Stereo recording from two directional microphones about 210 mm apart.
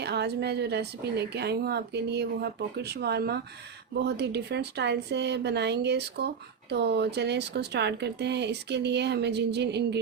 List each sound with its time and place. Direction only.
0.0 s a woman's voice: 50° right (ahead or behind)